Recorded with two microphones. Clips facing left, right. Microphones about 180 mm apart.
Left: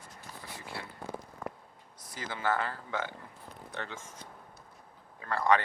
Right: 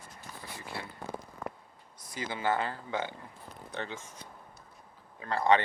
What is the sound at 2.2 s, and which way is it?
Speech, 20° right (ahead or behind).